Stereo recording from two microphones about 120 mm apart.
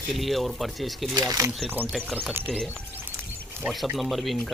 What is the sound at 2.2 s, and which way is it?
Speech, 15° right (ahead or behind).